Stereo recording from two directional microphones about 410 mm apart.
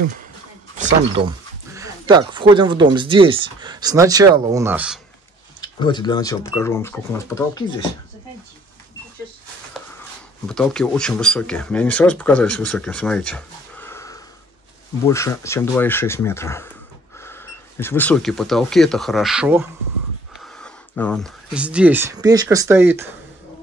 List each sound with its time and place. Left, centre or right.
0.7 s speech: centre
5.6 s speech: centre
10.5 s speech: centre
20.6 s speech: centre